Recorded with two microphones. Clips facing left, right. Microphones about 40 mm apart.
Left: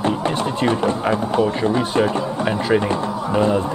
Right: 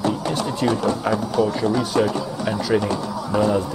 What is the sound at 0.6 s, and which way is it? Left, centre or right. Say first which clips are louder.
Speech: left 1 dB; left.